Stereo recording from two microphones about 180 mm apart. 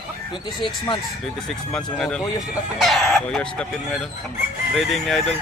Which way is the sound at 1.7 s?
5° left (ahead or behind).